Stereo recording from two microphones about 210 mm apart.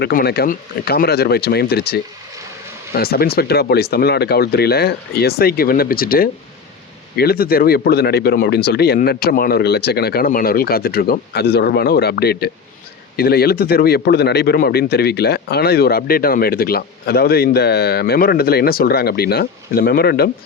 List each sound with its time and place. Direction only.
0.0 s speech: 45° left (ahead or behind)